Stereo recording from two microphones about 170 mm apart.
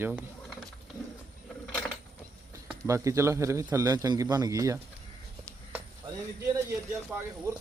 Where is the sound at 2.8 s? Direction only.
15° right (ahead or behind).